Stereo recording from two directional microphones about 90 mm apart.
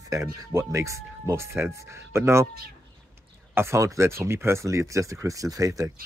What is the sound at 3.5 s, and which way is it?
Speech, 30° right (ahead or behind).